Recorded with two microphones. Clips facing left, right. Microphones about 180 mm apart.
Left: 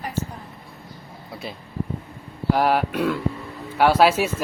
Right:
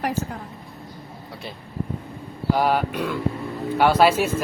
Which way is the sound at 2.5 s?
Centre (ahead or behind).